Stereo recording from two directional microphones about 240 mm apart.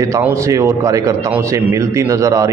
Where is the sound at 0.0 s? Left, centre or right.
Centre.